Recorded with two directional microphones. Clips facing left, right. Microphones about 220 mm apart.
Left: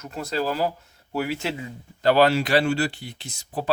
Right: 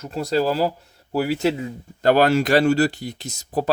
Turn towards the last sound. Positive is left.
turn(degrees=-40)  # may be behind; listen again after turning